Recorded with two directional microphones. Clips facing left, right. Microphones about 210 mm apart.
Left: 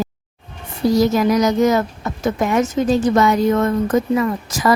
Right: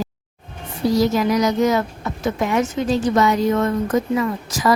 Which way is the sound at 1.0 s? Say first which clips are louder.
Left 2 dB; 45° left (ahead or behind).